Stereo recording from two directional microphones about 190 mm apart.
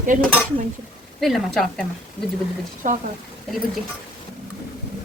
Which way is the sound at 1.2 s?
Centre (ahead or behind).